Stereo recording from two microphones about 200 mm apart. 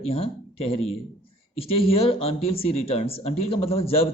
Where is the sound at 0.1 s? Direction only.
30° left (ahead or behind).